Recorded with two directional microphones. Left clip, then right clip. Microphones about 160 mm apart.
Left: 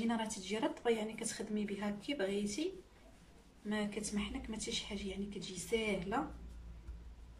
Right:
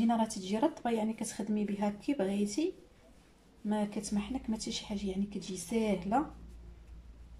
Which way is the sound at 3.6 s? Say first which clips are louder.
Right 4 dB; 35° right (ahead or behind).